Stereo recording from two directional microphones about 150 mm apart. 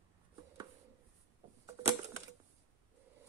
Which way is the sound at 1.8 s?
25° right (ahead or behind).